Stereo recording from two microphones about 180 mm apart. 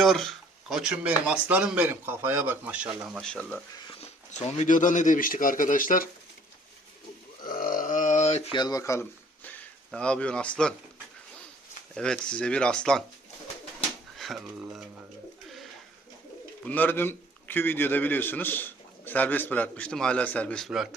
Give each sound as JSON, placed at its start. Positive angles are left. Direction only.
{"t": 0.0, "sound": "speech", "side_deg": 0}
{"t": 3.2, "sound": "speech", "side_deg": 5}
{"t": 3.8, "sound": "a sound", "side_deg": 30}
{"t": 4.3, "sound": "a man's voice", "side_deg": 35}
{"t": 7.4, "sound": "a sound", "side_deg": 50}
{"t": 8.5, "sound": "speech", "side_deg": 20}
{"t": 11.9, "sound": "speech", "side_deg": 5}
{"t": 14.2, "sound": "speech", "side_deg": 0}
{"t": 16.6, "sound": "a man's voice", "side_deg": 10}